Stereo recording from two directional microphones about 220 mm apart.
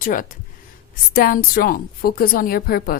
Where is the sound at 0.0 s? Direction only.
35° left (ahead or behind).